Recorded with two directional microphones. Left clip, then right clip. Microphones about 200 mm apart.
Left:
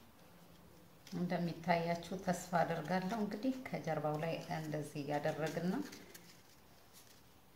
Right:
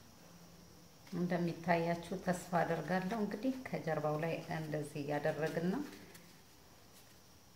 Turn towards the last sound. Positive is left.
turn(degrees=-15)  # may be behind; listen again after turning